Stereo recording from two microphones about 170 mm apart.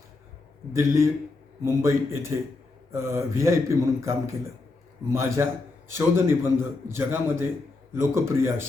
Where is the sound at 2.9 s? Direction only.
15° right (ahead or behind).